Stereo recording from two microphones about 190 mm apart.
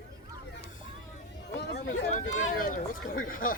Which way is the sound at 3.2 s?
45° left (ahead or behind).